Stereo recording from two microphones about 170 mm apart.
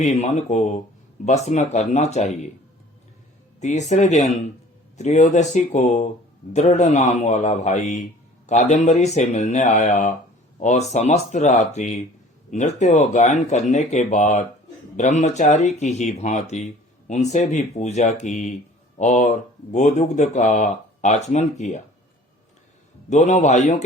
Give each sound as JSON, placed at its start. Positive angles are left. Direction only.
{"t": 0.0, "sound": "speech", "side_deg": 45}
{"t": 3.6, "sound": "speech", "side_deg": 45}
{"t": 23.0, "sound": "speech", "side_deg": 45}